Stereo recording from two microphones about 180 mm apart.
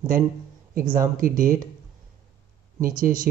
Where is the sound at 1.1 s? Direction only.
50° right (ahead or behind).